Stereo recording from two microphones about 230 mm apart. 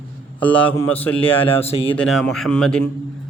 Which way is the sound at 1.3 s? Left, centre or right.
Left.